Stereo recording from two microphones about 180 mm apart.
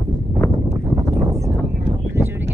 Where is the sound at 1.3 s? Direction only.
15° right (ahead or behind).